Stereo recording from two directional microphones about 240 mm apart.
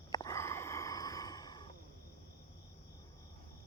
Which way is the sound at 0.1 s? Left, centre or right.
Centre.